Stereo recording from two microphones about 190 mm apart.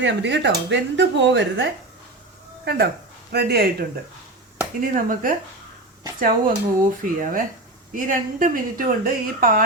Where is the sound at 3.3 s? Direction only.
55° right (ahead or behind).